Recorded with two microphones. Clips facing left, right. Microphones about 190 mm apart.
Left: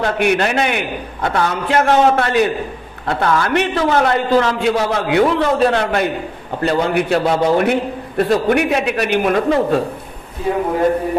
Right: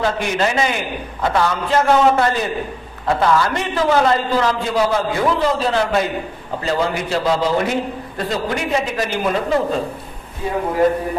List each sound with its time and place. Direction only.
0.0 s a man's voice: 65° left (ahead or behind)